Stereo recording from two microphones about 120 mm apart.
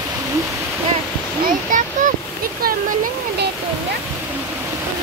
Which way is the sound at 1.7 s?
90° right.